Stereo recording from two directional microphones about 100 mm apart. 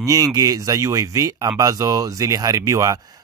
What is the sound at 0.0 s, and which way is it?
Speech, 35° right (ahead or behind).